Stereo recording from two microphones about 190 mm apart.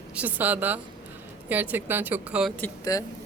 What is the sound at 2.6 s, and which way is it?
Speech, 15° left (ahead or behind).